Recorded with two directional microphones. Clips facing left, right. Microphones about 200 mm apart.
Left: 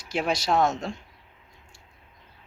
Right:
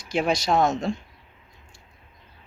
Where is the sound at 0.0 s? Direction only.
5° left (ahead or behind).